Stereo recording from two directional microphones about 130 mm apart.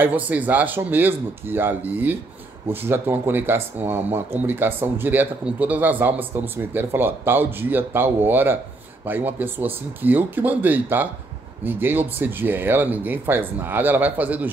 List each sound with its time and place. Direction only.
0.0 s speech: 15° right (ahead or behind)